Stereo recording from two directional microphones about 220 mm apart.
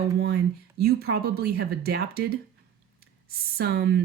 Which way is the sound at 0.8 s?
45° right (ahead or behind).